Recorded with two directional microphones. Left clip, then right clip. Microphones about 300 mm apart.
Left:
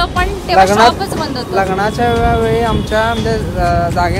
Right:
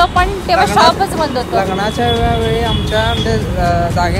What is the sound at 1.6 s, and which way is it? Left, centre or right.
Speech, centre.